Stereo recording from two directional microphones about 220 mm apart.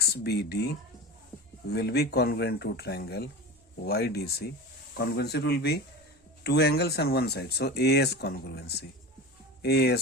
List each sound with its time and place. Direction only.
0.0 s speech: 45° left (ahead or behind)